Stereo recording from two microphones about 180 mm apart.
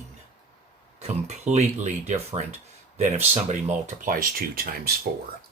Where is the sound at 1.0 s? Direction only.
35° right (ahead or behind); by 4.9 s 55° right (ahead or behind).